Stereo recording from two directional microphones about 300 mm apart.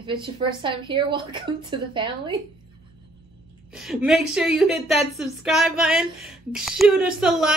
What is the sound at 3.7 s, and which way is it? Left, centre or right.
Speech, centre.